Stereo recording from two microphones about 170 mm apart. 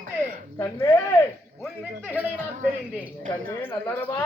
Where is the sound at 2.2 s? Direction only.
10° right (ahead or behind).